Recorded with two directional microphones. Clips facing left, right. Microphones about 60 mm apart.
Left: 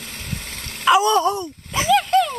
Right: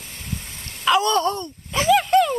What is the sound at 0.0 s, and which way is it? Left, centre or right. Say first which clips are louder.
Dog: left 2 dB; left.